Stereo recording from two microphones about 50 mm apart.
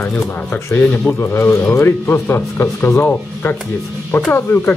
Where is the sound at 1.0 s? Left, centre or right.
Left.